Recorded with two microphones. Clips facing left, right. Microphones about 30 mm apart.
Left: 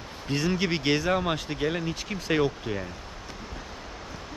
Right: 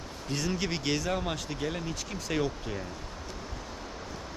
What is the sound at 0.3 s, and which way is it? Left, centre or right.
Speech, left.